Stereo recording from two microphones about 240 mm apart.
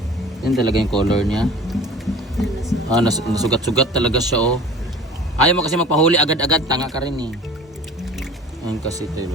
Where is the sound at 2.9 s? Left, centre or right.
Centre.